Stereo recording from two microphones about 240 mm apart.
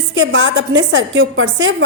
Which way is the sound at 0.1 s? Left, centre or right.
Right.